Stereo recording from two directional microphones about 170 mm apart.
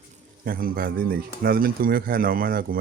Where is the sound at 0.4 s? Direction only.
60° right (ahead or behind).